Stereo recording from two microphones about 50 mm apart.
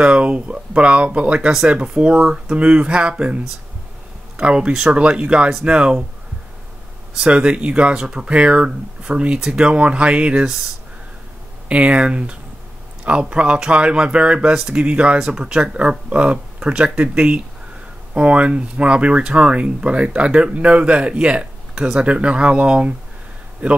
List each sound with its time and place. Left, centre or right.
0.0 s speech: right
7.2 s speech: right
10.4 s speech: centre
11.7 s speech: right